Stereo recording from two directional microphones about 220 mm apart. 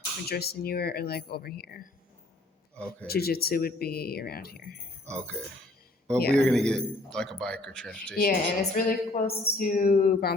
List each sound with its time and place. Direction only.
0.3 s speech: 45° left (ahead or behind)
2.7 s a man's voice: 5° left (ahead or behind)
3.1 s speech: 45° left (ahead or behind)
5.0 s a man's voice: 5° left (ahead or behind)
8.2 s a woman's voice: 40° left (ahead or behind)